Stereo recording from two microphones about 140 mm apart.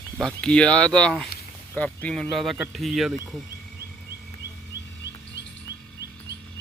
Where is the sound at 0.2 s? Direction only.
5° left (ahead or behind).